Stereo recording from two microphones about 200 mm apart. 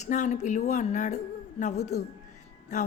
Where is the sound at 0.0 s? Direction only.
35° left (ahead or behind).